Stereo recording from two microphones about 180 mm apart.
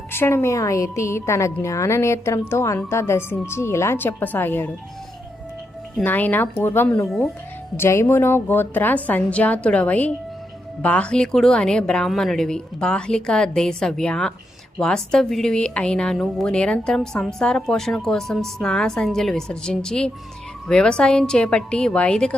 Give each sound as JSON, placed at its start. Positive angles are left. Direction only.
{"t": 0.1, "sound": "a woman's voice", "side_deg": 10}
{"t": 6.0, "sound": "a woman's voice", "side_deg": 10}